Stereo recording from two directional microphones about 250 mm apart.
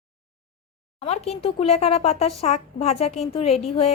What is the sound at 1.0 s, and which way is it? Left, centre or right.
A woman's voice, left.